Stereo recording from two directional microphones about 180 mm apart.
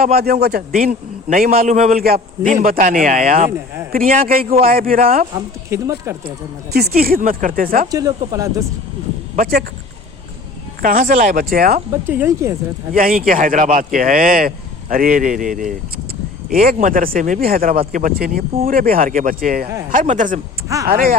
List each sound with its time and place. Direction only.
0.0 s a man's voice: 60° right (ahead or behind)
5.7 s speech: 15° right (ahead or behind)
6.7 s a man's voice: 60° right (ahead or behind)
7.9 s speech: 20° right (ahead or behind)
9.3 s speech: 55° right (ahead or behind)
10.8 s a man's voice: 50° right (ahead or behind)
11.9 s speech: 15° right (ahead or behind)
12.9 s a man's voice: 50° right (ahead or behind)